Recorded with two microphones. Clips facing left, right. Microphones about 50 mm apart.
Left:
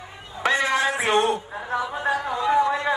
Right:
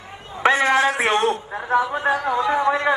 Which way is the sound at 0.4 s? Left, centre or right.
Right.